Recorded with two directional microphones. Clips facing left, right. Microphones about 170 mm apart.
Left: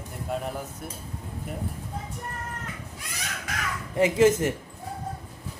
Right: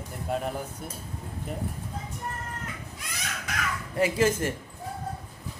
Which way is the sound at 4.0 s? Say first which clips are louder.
Left 4 dB; 20° left (ahead or behind).